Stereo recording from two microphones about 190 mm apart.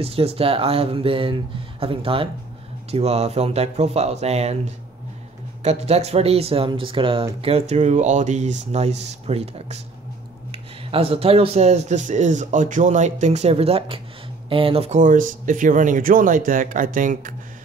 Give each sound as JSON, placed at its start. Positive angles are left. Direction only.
{"t": 0.0, "sound": "speech", "side_deg": -30}
{"t": 5.6, "sound": "speech", "side_deg": -35}